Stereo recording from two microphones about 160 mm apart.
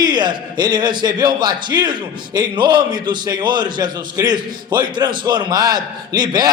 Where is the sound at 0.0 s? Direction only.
25° right (ahead or behind).